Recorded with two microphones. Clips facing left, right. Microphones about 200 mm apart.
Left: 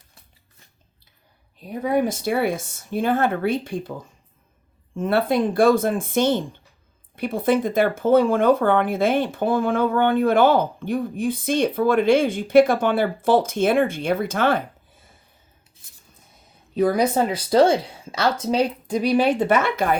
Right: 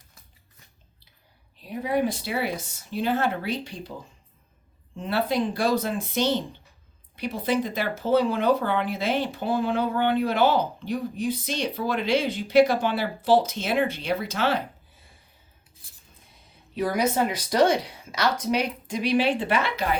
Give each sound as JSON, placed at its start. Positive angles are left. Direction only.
{"t": 1.8, "sound": "speech", "side_deg": 50}
{"t": 4.9, "sound": "speech", "side_deg": 55}
{"t": 16.9, "sound": "speech", "side_deg": 30}